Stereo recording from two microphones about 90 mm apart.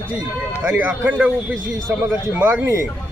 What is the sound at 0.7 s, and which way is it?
Speech, 15° right (ahead or behind).